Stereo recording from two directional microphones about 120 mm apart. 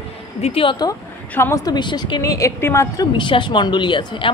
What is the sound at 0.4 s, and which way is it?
Speech, 50° left (ahead or behind).